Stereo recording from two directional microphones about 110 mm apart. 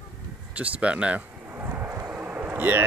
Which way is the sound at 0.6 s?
10° right (ahead or behind).